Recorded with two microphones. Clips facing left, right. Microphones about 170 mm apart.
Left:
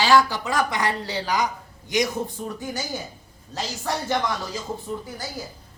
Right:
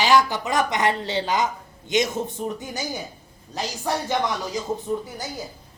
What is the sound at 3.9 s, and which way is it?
Speech, 15° right (ahead or behind).